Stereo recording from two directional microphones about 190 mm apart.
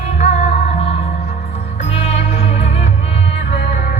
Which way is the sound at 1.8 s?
35° left (ahead or behind).